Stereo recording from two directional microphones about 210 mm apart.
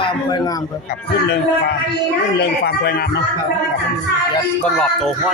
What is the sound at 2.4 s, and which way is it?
Speech, 50° left (ahead or behind).